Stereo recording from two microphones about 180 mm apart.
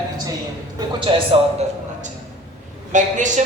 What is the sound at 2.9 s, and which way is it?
Speech, 45° right (ahead or behind).